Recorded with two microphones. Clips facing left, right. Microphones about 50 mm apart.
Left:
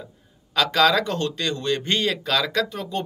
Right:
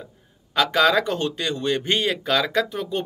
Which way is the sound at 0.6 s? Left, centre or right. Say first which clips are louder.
Even; right.